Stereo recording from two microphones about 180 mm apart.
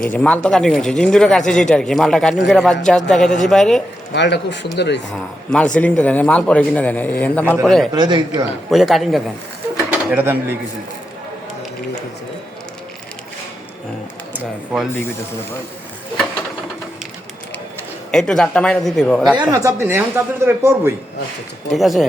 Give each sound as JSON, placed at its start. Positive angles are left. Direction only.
{"t": 0.0, "sound": "speech", "side_deg": 5}
{"t": 4.1, "sound": "speech", "side_deg": 75}
{"t": 5.1, "sound": "speech", "side_deg": 5}
{"t": 7.9, "sound": "speech", "side_deg": -25}
{"t": 8.7, "sound": "speech", "side_deg": 0}
{"t": 14.3, "sound": "speech", "side_deg": -5}
{"t": 18.1, "sound": "speech", "side_deg": 0}
{"t": 19.4, "sound": "speech", "side_deg": -20}
{"t": 21.7, "sound": "speech", "side_deg": 0}